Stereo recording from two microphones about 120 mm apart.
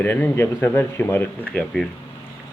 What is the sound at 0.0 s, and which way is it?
Speech, 15° left (ahead or behind).